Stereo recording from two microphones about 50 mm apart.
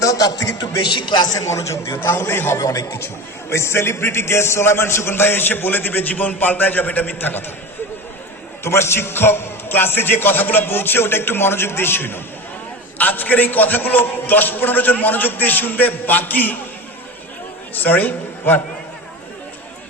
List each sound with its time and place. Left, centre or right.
0.0 s a man's voice: left
2.0 s a man's voice: left
3.5 s a man's voice: left
8.6 s a man's voice: left
13.0 s a man's voice: left
17.7 s a man's voice: left